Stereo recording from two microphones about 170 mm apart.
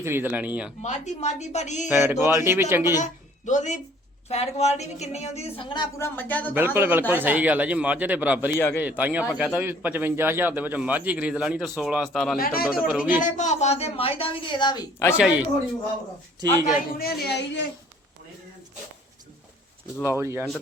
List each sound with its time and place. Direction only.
0.0 s a man's voice: 15° right (ahead or behind)
0.8 s speech: 45° left (ahead or behind)
1.9 s a man's voice: 10° right (ahead or behind)
3.0 s a woman's voice: 45° left (ahead or behind); by 5.9 s 30° left (ahead or behind)
6.0 s speech: 10° left (ahead or behind)
6.7 s a man's voice: 10° right (ahead or behind)
8.5 s speech: 15° left (ahead or behind)
8.8 s a man's voice: 10° right (ahead or behind)
12.4 s speech: 60° left (ahead or behind)
12.9 s a man's voice: 5° right (ahead or behind)
13.2 s a woman's voice: 45° left (ahead or behind); by 15.1 s 20° left (ahead or behind)
15.1 s a man's voice: 10° right (ahead or behind)
16.6 s speech: 65° left (ahead or behind); by 17.7 s 85° left
20.1 s a man's voice: 15° right (ahead or behind)